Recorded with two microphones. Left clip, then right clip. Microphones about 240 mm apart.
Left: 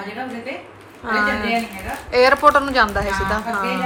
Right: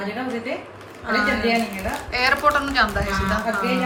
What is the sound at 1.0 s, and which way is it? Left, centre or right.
A woman's voice, centre.